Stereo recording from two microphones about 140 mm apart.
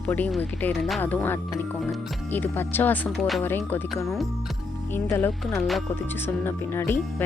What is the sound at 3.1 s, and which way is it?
Speech, centre (ahead or behind).